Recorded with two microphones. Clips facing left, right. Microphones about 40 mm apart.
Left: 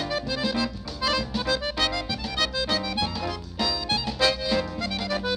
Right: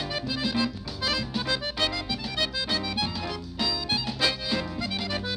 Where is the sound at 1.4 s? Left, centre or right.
Centre.